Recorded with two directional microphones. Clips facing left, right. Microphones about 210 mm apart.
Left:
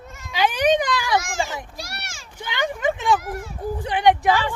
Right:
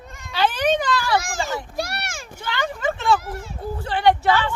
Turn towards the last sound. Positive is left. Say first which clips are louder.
# even
turn(degrees=15)  # may be behind; listen again after turning